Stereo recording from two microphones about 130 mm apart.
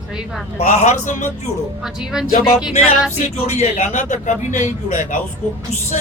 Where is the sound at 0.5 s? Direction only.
55° left (ahead or behind).